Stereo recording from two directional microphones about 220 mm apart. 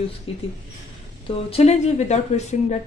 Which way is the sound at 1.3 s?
25° left (ahead or behind).